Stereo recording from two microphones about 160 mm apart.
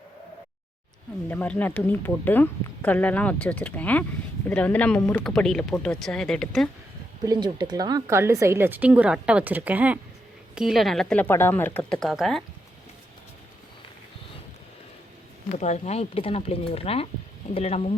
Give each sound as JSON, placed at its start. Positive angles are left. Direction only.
{"t": 1.3, "sound": "speech", "side_deg": 10}
{"t": 7.3, "sound": "a woman's voice", "side_deg": -25}
{"t": 15.5, "sound": "speech", "side_deg": 45}